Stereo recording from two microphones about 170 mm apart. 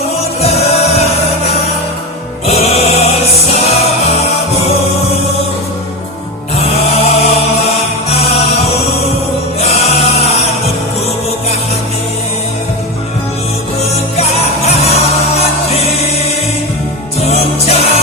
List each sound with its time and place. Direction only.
0.4 s music: 40° left (ahead or behind)
2.5 s music: 40° left (ahead or behind)
6.6 s chant: 35° left (ahead or behind)
9.6 s music: 35° left (ahead or behind)
14.2 s music: 40° left (ahead or behind)
17.2 s music: 40° left (ahead or behind)